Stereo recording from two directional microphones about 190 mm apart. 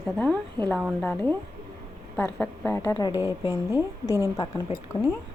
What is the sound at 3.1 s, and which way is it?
Speech, 15° right (ahead or behind).